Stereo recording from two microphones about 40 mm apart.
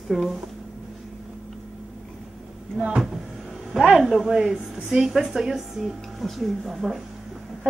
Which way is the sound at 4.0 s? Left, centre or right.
Centre.